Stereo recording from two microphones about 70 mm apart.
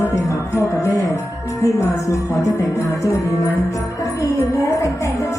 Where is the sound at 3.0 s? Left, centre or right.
Left.